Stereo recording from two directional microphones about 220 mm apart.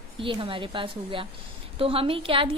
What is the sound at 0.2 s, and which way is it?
A woman's voice, 25° right (ahead or behind).